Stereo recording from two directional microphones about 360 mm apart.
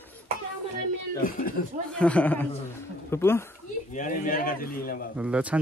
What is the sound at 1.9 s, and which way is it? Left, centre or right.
Speech, centre.